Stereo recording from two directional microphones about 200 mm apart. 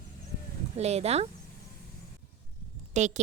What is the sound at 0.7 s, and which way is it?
Speech, 30° right (ahead or behind).